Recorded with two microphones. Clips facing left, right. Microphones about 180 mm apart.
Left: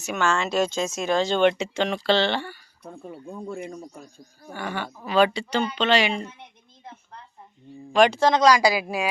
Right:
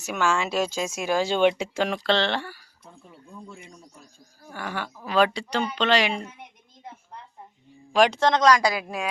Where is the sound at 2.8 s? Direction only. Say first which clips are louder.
Left 11 dB; 60° left (ahead or behind).